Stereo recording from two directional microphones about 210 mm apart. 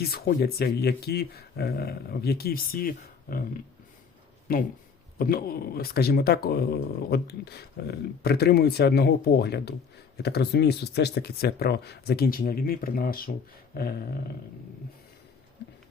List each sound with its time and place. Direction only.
0.0 s speech: 45° left (ahead or behind)
4.5 s speech: 45° left (ahead or behind)